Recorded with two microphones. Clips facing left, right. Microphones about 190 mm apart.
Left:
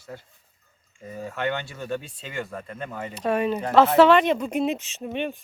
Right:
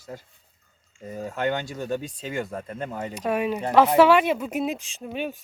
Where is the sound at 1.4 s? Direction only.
40° right (ahead or behind).